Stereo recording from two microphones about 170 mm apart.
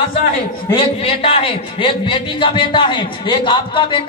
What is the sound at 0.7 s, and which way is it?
A man's voice, 35° left (ahead or behind).